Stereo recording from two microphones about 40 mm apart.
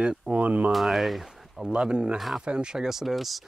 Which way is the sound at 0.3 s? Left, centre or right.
Right.